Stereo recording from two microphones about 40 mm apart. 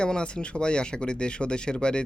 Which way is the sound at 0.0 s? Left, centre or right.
Left.